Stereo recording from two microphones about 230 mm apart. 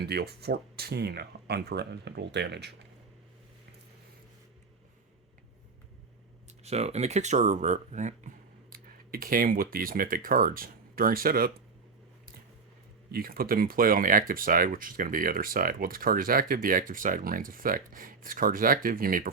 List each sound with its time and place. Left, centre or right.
0.0 s speech: right
6.7 s speech: right
13.1 s speech: right